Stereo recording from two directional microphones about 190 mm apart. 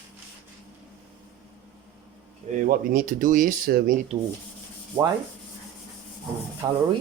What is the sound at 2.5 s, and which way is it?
Speech, 45° right (ahead or behind).